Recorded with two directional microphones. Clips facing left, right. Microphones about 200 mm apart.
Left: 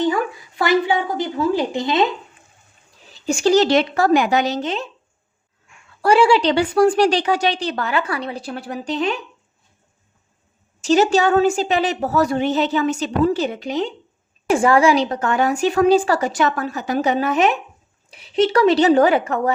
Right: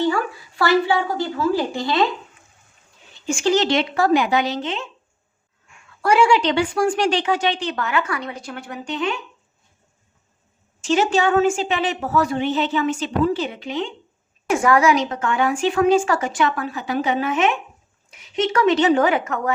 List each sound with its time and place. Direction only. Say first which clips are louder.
0.0 s a woman's voice: left 1 dB; 15° left (ahead or behind)
3.1 s speech: left 3 dB; 35° left (ahead or behind)
6.0 s speech: left 2 dB; 30° left (ahead or behind)
10.8 s speech: left 3 dB; 40° left (ahead or behind)